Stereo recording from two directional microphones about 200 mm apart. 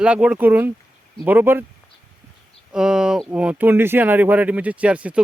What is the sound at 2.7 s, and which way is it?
Speech, 5° right (ahead or behind).